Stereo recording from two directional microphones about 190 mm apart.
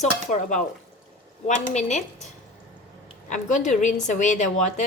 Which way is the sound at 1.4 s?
40° left (ahead or behind).